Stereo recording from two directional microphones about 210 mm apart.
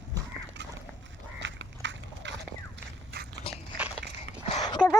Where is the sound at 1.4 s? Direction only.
60° right (ahead or behind).